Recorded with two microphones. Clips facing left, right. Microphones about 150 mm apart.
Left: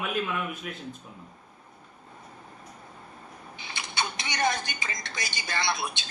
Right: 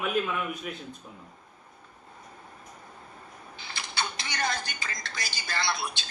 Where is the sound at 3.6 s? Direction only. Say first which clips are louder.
Left 1 dB; 20° left (ahead or behind).